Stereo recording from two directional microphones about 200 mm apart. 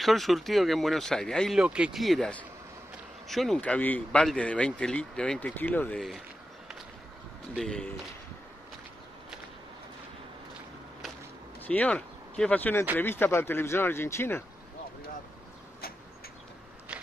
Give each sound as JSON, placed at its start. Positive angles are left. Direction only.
{"t": 0.0, "sound": "speech", "side_deg": 0}
{"t": 7.5, "sound": "speech", "side_deg": 5}
{"t": 11.6, "sound": "speech", "side_deg": 10}